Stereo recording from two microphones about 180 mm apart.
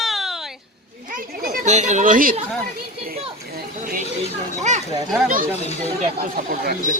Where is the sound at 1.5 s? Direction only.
40° right (ahead or behind).